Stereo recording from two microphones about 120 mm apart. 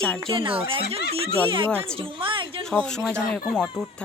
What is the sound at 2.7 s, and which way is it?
Speech, 5° left (ahead or behind).